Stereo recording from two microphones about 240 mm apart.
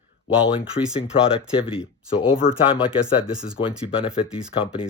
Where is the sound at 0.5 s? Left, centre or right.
Left.